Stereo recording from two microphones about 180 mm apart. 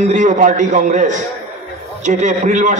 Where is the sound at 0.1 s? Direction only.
45° right (ahead or behind).